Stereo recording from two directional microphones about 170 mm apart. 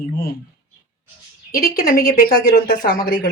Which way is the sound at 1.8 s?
60° left (ahead or behind).